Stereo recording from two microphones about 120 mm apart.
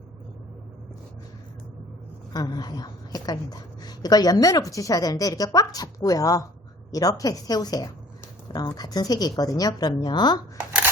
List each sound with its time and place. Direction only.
2.3 s a woman's voice: 35° left (ahead or behind)